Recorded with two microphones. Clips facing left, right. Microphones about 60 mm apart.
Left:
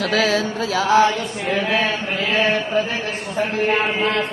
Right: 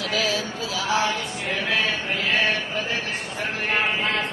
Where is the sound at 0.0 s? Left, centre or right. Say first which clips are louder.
Left 6 dB; left.